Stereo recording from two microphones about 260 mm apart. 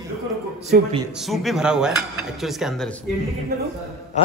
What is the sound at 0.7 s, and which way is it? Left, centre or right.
Speech, right.